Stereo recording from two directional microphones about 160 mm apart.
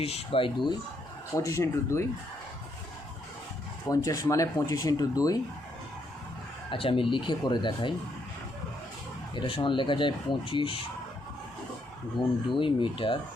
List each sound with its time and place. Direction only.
0.0 s speech: 40° left (ahead or behind)
1.3 s speech: 20° left (ahead or behind)
3.8 s speech: 20° left (ahead or behind)
6.7 s speech: 35° left (ahead or behind)
9.3 s speech: 30° left (ahead or behind)
12.5 s speech: 30° left (ahead or behind)